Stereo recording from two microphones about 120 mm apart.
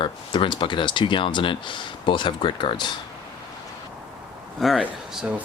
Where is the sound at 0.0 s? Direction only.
40° left (ahead or behind).